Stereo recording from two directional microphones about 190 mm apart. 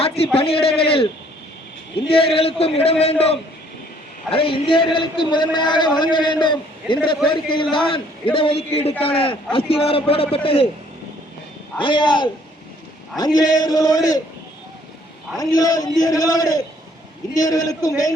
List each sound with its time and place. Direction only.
0.3 s a man's voice: 30° left (ahead or behind)
2.3 s a man's voice: 30° left (ahead or behind)
4.3 s a man's voice: 30° left (ahead or behind)
11.8 s a man's voice: 25° left (ahead or behind)
15.4 s a man's voice: 20° left (ahead or behind)